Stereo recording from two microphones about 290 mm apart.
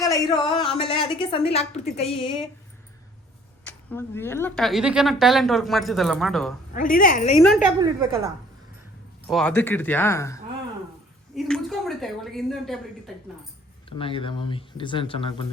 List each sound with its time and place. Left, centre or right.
0.0 s a woman's voice: centre
3.6 s a woman's voice: centre
6.7 s a woman's voice: left
7.4 s a woman's voice: centre
7.8 s a woman's voice: centre
9.2 s a woman's voice: centre
13.9 s a woman's voice: centre